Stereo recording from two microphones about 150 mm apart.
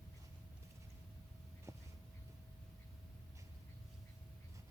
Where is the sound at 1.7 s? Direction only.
20° right (ahead or behind).